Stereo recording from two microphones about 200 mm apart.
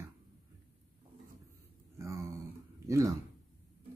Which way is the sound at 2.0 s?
15° right (ahead or behind).